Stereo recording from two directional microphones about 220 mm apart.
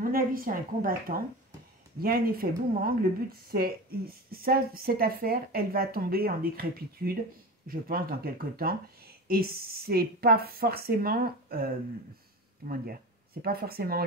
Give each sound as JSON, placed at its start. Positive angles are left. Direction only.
{"t": 0.0, "sound": "a woman's voice", "side_deg": -40}